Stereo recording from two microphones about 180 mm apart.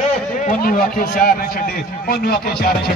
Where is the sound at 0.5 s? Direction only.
55° left (ahead or behind).